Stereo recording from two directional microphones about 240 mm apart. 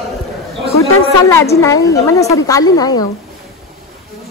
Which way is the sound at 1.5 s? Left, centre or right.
Centre.